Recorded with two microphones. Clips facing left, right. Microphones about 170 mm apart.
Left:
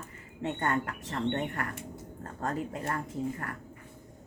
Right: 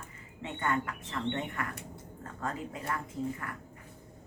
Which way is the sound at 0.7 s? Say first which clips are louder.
Left 1 dB; 55° left (ahead or behind).